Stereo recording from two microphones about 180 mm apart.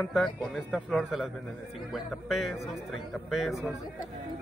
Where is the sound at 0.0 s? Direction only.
Centre (ahead or behind).